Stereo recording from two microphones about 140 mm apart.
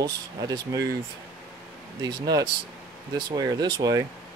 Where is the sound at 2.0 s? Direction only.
30° right (ahead or behind).